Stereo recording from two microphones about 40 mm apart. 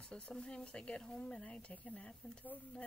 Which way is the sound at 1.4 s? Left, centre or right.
Left.